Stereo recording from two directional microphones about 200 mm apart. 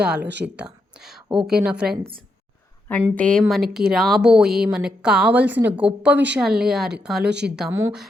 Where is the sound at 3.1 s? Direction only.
5° left (ahead or behind).